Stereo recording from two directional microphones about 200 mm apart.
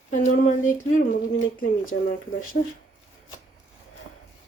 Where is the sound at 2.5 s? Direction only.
55° left (ahead or behind).